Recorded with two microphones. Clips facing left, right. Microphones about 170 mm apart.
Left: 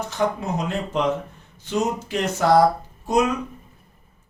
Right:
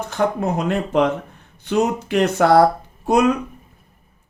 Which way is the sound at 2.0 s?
65° right (ahead or behind).